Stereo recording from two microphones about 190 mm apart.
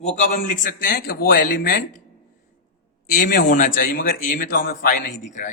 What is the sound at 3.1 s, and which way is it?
A man's voice, 45° left (ahead or behind).